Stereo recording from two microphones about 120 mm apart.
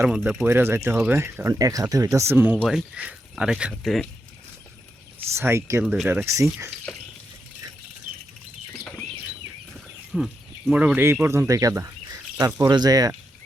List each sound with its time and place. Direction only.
0.0 s speech: 10° right (ahead or behind)
0.4 s speech: 20° right (ahead or behind)
2.6 s speech: 5° right (ahead or behind)
5.3 s speech: 20° right (ahead or behind)
9.7 s livestock: centre (ahead or behind)
10.7 s speech: 10° right (ahead or behind); by 13.1 s 30° right (ahead or behind)